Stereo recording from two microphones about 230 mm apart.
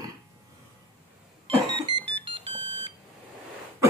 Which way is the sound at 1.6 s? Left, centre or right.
Right.